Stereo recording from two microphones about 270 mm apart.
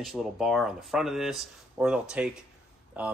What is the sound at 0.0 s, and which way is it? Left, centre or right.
Speech, centre.